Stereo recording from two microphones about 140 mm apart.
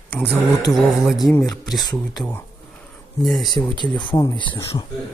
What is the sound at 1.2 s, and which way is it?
Speech, 25° left (ahead or behind).